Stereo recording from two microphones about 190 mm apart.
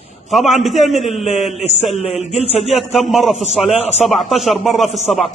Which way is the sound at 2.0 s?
35° left (ahead or behind).